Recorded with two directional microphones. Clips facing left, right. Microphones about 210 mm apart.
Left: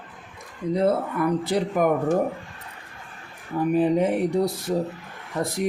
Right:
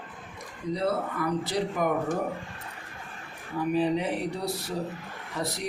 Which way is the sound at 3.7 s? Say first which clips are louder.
Left 6 dB; 50° left (ahead or behind).